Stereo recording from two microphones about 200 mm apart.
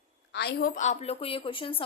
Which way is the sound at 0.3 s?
55° left (ahead or behind).